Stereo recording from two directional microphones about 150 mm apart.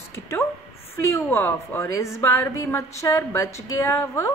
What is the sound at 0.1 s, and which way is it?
A woman's voice, 15° left (ahead or behind).